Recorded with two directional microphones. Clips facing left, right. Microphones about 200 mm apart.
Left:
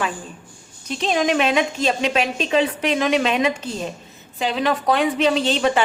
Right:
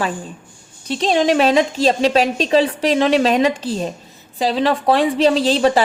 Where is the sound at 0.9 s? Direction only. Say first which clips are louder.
Right 4 dB; 30° right (ahead or behind).